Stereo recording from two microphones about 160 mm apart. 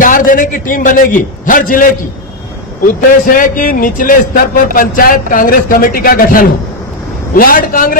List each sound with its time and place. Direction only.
0.0 s a man's voice: 60° left (ahead or behind)
2.9 s a man's voice: 60° left (ahead or behind)